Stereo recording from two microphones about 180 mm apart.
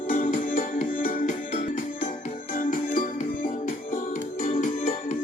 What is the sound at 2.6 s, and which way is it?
Music, 50° left (ahead or behind).